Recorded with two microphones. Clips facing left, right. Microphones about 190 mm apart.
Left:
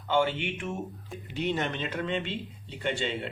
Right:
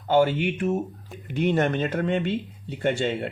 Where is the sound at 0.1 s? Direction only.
40° right (ahead or behind).